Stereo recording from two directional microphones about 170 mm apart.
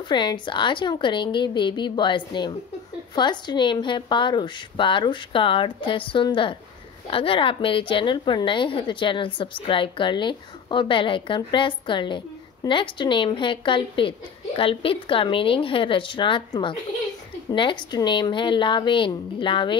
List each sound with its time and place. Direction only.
0.0 s a woman's voice: 25° left (ahead or behind)